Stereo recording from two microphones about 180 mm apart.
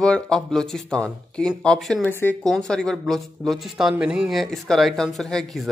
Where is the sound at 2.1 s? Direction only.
10° left (ahead or behind).